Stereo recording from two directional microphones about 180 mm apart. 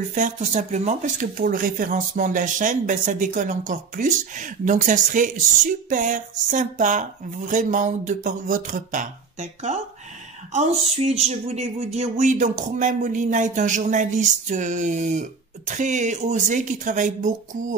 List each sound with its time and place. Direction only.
0.1 s speech: 45° right (ahead or behind)